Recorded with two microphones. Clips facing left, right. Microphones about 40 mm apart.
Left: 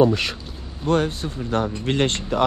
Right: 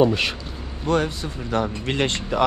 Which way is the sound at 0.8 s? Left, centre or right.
Right.